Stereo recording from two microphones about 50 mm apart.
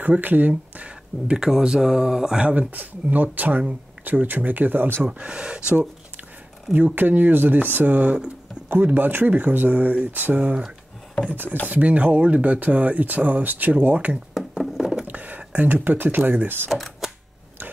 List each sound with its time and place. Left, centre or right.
0.0 s speech: right; by 2.4 s centre
2.7 s speech: right
5.0 s speech: right
6.7 s speech: right
8.6 s speech: right
11.6 s speech: right
14.8 s a sound: centre
15.0 s speech: right
16.7 s cash register: centre